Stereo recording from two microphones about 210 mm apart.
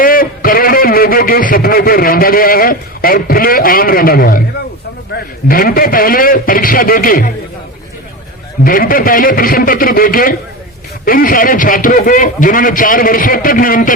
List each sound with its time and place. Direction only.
0.0 s a man's voice: 45° left (ahead or behind)
5.5 s a man's voice: 45° left (ahead or behind)
8.6 s a man's voice: 40° left (ahead or behind)